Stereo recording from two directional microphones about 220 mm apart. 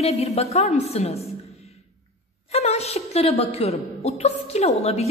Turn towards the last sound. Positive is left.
turn(degrees=30)  # may be behind; listen again after turning